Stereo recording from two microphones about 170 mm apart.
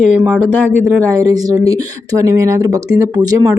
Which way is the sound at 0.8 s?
15° right (ahead or behind).